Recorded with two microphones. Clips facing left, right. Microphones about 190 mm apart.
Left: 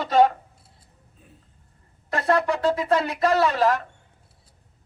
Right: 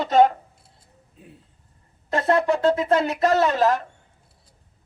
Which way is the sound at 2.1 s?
25° right (ahead or behind).